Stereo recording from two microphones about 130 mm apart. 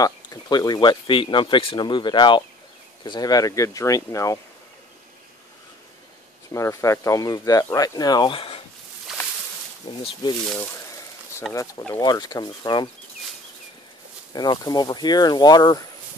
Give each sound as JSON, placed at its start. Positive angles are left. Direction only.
{"t": 0.0, "sound": "speech", "side_deg": 30}
{"t": 6.5, "sound": "speech", "side_deg": 25}
{"t": 8.4, "sound": "a sound", "side_deg": 50}
{"t": 9.1, "sound": "a sound", "side_deg": -5}
{"t": 9.8, "sound": "speech", "side_deg": 45}
{"t": 11.5, "sound": "speech", "side_deg": 25}
{"t": 14.3, "sound": "speech", "side_deg": 30}